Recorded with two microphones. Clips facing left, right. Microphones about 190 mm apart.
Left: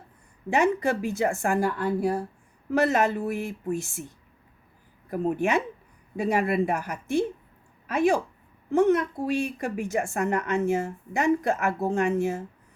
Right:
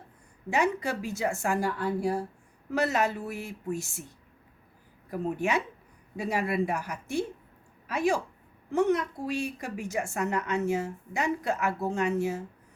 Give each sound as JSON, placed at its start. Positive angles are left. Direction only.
{"t": 0.5, "sound": "a woman's voice", "side_deg": 55}
{"t": 5.1, "sound": "a woman's voice", "side_deg": 55}